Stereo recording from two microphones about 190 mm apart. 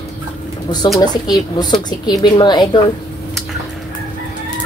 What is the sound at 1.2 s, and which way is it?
A woman's voice, 20° left (ahead or behind).